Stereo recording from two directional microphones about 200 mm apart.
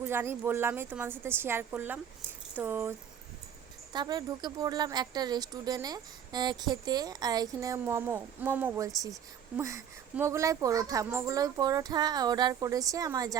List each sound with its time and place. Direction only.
0.0 s speech: 10° right (ahead or behind)
3.9 s speech: 20° right (ahead or behind)